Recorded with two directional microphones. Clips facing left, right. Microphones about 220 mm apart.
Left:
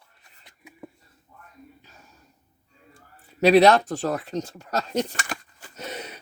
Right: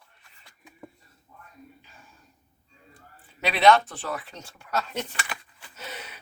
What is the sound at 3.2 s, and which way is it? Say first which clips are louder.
Speech: left 5 dB; 40° left (ahead or behind).